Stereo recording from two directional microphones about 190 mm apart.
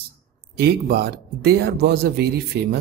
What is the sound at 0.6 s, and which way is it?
Speech, 55° right (ahead or behind).